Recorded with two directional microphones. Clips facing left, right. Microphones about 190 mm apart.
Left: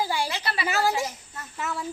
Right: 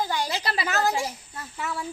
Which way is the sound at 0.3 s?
35° right (ahead or behind).